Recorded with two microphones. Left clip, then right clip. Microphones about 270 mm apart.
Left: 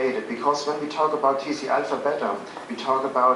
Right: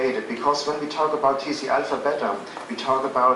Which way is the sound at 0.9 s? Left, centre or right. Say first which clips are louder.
Even; centre.